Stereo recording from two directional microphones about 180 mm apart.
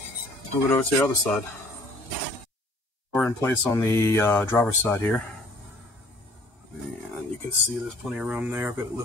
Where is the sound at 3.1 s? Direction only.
10° left (ahead or behind).